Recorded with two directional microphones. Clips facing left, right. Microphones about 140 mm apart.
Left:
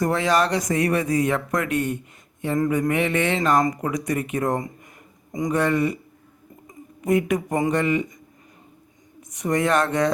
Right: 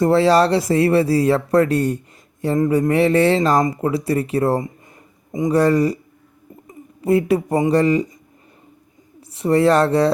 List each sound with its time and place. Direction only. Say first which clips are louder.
0.0 s a man's voice: right 7 dB; 30° right (ahead or behind)
9.3 s speech: right 6 dB; 30° right (ahead or behind)